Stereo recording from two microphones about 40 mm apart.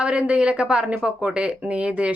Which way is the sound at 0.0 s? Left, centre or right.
Right.